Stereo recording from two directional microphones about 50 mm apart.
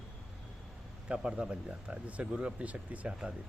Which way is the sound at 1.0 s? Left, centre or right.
Centre.